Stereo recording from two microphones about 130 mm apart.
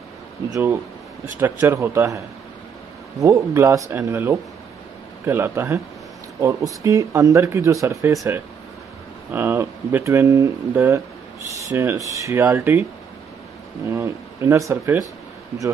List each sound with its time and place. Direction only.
0.5 s speech: 20° right (ahead or behind)
13.8 s speech: 20° right (ahead or behind)